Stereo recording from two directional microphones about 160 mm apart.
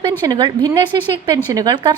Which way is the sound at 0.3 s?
25° right (ahead or behind).